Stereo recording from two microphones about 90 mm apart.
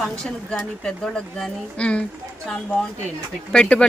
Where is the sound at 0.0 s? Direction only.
5° left (ahead or behind).